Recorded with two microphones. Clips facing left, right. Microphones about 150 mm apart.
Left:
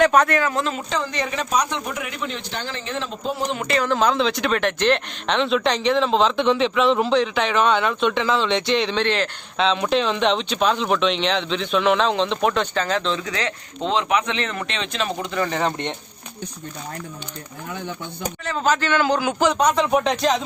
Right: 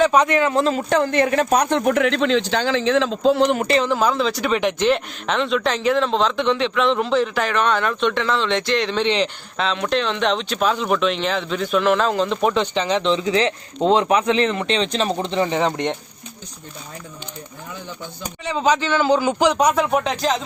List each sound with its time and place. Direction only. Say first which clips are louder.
0.1 s a man's voice: right 1 dB; 10° right (ahead or behind)
0.3 s speech: right 4 dB; 25° right (ahead or behind)
0.9 s speech: right 8 dB; 55° right (ahead or behind); by 3.5 s 85° right
3.5 s a man's voice: right 5 dB; 45° right (ahead or behind)
3.9 s speech: even; 5° right (ahead or behind)
4.5 s speech: right 2 dB; 10° right (ahead or behind)
9.0 s a man's voice: right 3 dB; 15° right (ahead or behind)
9.6 s a man's voice: left 2 dB; centre (ahead or behind)
18.7 s a man's voice: right 2 dB; 10° right (ahead or behind)